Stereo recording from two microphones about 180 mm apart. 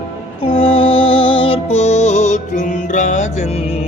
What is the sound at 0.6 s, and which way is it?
Music, 30° left (ahead or behind).